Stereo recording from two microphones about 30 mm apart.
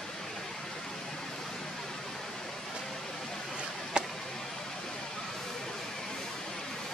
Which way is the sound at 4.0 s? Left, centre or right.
Right.